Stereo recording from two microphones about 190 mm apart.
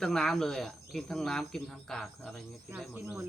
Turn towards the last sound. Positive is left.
turn(degrees=-10)  # may be behind; listen again after turning